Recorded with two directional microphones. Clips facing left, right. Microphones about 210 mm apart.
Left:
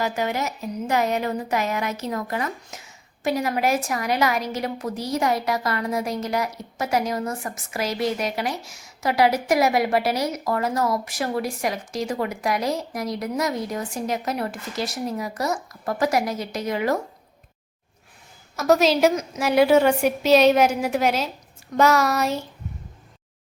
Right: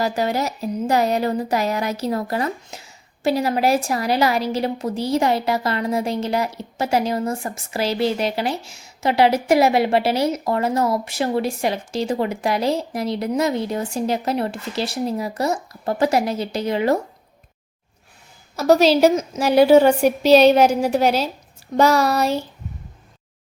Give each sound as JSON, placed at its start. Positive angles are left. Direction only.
{"t": 0.0, "sound": "a woman's voice", "side_deg": -35}
{"t": 18.5, "sound": "speech", "side_deg": -30}